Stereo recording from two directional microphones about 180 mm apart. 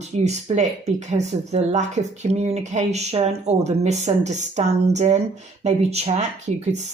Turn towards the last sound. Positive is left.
turn(degrees=-40)  # may be behind; listen again after turning